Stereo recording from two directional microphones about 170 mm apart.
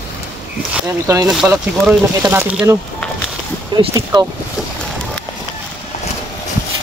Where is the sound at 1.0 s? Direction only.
20° right (ahead or behind).